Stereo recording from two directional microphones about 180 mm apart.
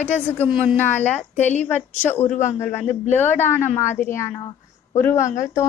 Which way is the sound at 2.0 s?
10° left (ahead or behind).